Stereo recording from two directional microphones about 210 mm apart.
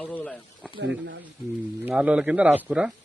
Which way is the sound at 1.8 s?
5° right (ahead or behind).